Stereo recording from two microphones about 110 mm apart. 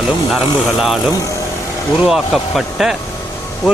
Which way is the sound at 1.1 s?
30° left (ahead or behind).